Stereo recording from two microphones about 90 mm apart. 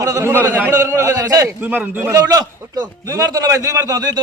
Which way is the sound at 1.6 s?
20° right (ahead or behind).